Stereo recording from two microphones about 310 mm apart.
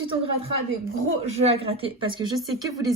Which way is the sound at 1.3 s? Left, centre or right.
Centre.